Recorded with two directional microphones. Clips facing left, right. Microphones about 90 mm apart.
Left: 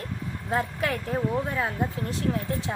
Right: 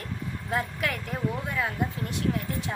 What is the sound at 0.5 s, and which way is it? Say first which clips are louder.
Speech: left 3 dB; 30° left (ahead or behind).